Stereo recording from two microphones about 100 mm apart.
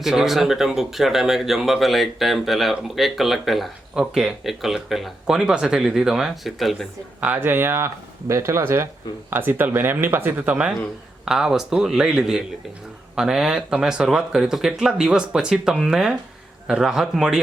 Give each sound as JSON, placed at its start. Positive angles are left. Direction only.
{"t": 0.0, "sound": "speech", "side_deg": -5}
{"t": 7.2, "sound": "speech", "side_deg": -15}